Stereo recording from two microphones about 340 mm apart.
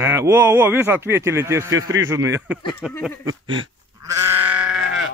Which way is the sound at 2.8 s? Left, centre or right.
Centre.